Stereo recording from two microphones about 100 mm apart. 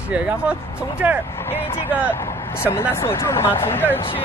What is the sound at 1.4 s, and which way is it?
Speech, 20° left (ahead or behind).